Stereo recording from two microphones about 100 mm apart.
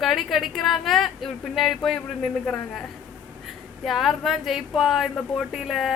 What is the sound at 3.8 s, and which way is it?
A woman's voice, centre (ahead or behind).